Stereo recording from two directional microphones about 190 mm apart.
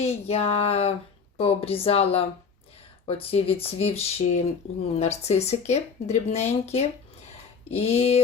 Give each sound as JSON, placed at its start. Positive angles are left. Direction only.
{"t": 0.0, "sound": "speech", "side_deg": 35}